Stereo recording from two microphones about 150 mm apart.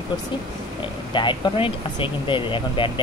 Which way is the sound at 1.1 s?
30° left (ahead or behind).